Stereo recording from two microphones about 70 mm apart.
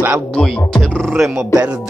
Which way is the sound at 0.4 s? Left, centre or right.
Centre.